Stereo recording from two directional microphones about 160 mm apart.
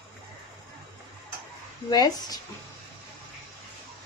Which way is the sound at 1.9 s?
25° left (ahead or behind).